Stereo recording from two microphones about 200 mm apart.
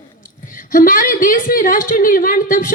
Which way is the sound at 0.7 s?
45° left (ahead or behind).